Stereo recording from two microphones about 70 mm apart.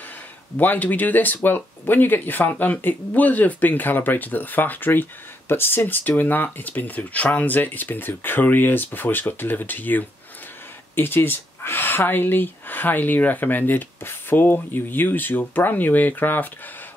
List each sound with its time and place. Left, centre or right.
0.6 s speech: left